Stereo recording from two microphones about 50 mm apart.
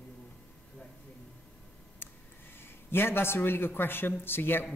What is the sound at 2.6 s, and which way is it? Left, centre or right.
A man's voice, left.